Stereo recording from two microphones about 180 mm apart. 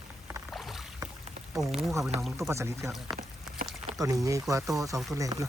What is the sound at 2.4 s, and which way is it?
Speech, 15° right (ahead or behind).